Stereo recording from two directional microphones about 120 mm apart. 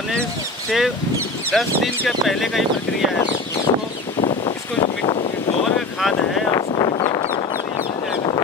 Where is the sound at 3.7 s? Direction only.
35° left (ahead or behind).